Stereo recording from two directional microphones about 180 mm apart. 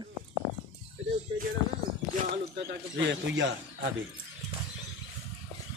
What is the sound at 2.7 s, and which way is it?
A man's voice, 80° right.